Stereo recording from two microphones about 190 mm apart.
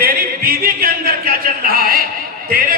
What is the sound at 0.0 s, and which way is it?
Speech, 50° right (ahead or behind).